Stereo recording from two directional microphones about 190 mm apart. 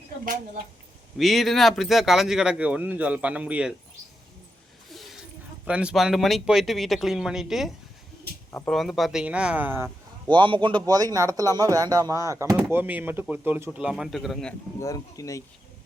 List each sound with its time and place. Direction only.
1.2 s speech: centre (ahead or behind)
4.9 s a sound: centre (ahead or behind)
5.6 s speech: 5° right (ahead or behind)
10.2 s speech: 25° right (ahead or behind); by 14.5 s centre (ahead or behind)
14.8 s speech: 20° left (ahead or behind)